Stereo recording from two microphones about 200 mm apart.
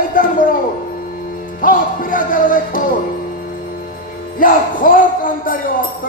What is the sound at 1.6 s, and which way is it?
Speech, 45° left (ahead or behind).